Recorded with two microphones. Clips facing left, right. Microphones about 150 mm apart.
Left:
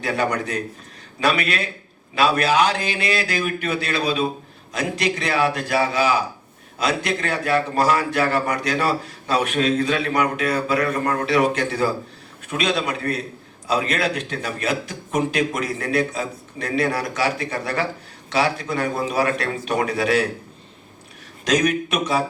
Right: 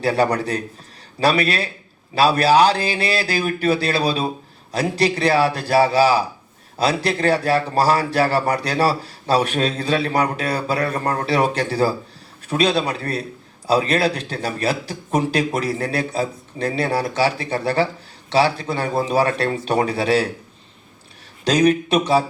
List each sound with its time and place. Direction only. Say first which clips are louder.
0.0 s a man's voice: right 4 dB; 35° right (ahead or behind)
21.4 s a man's voice: right 4 dB; 30° right (ahead or behind)